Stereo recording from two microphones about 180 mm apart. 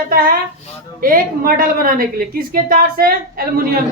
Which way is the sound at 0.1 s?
55° right (ahead or behind).